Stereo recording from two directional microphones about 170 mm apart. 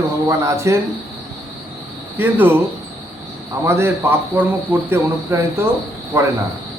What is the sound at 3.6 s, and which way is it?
A man's voice, 15° right (ahead or behind).